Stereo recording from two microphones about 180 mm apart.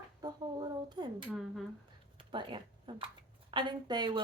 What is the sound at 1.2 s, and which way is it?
Speech, centre (ahead or behind).